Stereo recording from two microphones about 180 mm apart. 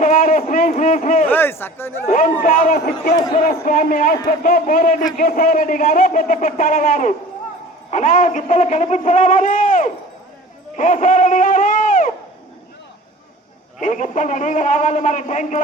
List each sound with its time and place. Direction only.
0.0 s speech: 45° left (ahead or behind)
1.3 s speech: 10° left (ahead or behind)
2.0 s speech: 50° left (ahead or behind)
10.8 s a sound: 45° left (ahead or behind)
13.7 s speech: 45° left (ahead or behind)